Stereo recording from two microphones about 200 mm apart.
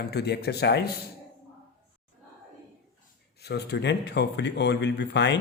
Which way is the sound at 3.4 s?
55° left (ahead or behind).